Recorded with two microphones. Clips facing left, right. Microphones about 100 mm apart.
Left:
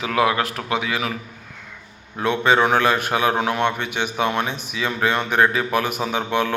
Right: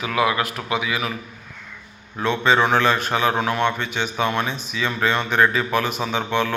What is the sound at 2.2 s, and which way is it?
A man's voice, 15° left (ahead or behind).